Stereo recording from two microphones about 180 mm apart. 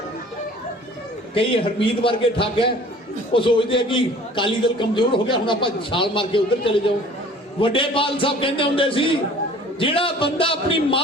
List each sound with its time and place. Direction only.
1.3 s a man's voice: 30° left (ahead or behind)